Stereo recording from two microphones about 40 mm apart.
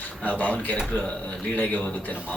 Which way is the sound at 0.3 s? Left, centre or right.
Left.